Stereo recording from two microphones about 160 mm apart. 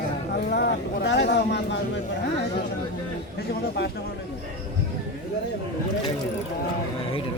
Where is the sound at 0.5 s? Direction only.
90° left.